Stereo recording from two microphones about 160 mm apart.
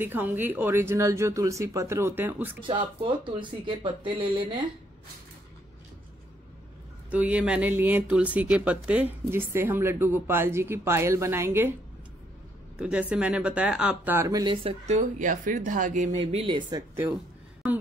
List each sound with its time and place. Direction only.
0.0 s speech: 10° right (ahead or behind)
2.6 s speech: 30° right (ahead or behind)
7.1 s speech: 10° right (ahead or behind)
12.7 s speech: 5° right (ahead or behind); by 15.0 s 35° right (ahead or behind)
15.0 s speech: 55° right (ahead or behind)
16.2 s speech: 35° right (ahead or behind)